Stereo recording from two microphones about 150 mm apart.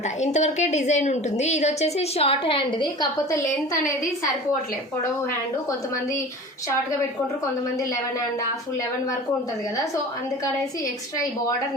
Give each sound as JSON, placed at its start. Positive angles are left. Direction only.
{"t": 0.0, "sound": "a woman's voice", "side_deg": 50}
{"t": 3.2, "sound": "a woman's voice", "side_deg": 20}
{"t": 5.6, "sound": "a woman's voice", "side_deg": 20}